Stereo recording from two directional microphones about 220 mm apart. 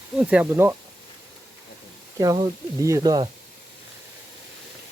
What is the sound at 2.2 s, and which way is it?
Speech, 20° right (ahead or behind).